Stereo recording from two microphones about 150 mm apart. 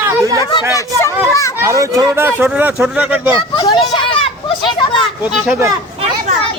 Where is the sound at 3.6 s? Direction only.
25° left (ahead or behind).